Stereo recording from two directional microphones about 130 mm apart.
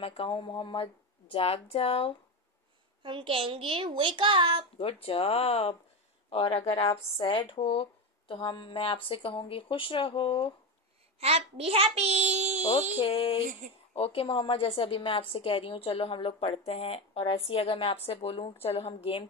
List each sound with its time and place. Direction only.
0.0 s a woman's voice: 45° left (ahead or behind)
3.0 s a child's voice: 40° right (ahead or behind)
4.7 s a woman's voice: 45° left (ahead or behind)
11.1 s a child's voice: 50° right (ahead or behind)
13.0 s a woman's voice: 45° left (ahead or behind)